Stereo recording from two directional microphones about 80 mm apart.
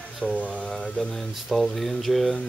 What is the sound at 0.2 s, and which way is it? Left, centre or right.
Speech, centre.